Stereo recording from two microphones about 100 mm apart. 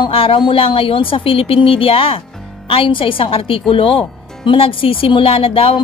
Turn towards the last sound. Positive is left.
turn(degrees=70)  # may be behind; listen again after turning